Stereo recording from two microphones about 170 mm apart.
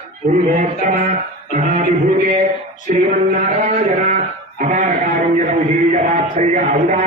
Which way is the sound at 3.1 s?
50° right (ahead or behind).